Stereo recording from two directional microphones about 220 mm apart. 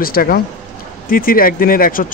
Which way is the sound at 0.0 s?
40° left (ahead or behind).